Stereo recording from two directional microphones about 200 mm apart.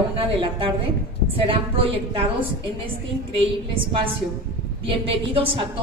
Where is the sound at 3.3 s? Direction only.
25° right (ahead or behind).